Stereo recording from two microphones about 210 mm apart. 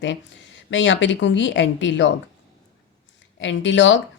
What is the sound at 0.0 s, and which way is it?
A woman's voice, 60° left (ahead or behind).